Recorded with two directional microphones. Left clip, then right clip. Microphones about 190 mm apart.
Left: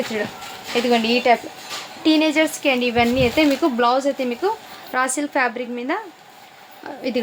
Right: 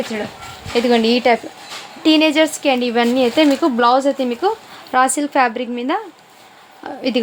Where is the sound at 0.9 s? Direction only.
45° right (ahead or behind).